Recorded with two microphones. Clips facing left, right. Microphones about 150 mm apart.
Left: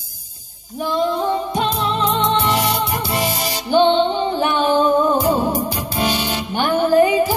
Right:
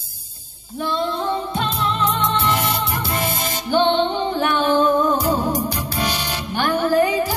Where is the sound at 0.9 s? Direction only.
15° left (ahead or behind).